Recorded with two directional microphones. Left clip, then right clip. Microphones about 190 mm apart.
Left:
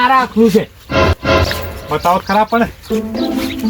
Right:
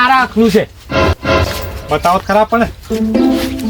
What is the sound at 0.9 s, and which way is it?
Music, centre (ahead or behind).